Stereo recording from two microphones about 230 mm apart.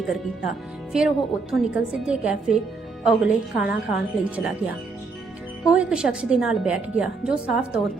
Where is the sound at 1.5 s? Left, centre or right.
Centre.